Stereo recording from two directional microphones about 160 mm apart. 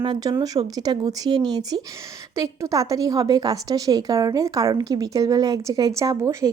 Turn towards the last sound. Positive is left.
turn(degrees=-20)  # may be behind; listen again after turning